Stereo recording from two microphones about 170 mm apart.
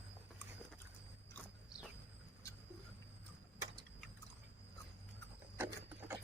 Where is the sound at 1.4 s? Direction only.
10° left (ahead or behind).